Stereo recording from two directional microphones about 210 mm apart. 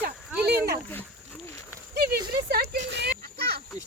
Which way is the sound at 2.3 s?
50° right (ahead or behind).